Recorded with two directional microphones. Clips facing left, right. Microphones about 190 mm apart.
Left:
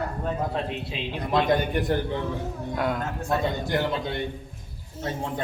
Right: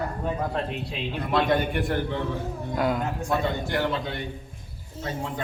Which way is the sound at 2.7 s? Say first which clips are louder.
Right 2 dB; centre (ahead or behind).